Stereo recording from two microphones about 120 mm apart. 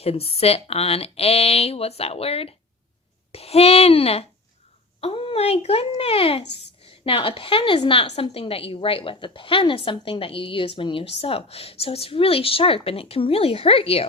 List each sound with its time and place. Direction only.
0.0 s a woman's voice: 55° left (ahead or behind)